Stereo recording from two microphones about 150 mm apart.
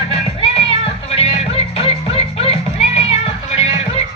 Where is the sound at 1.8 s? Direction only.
40° left (ahead or behind).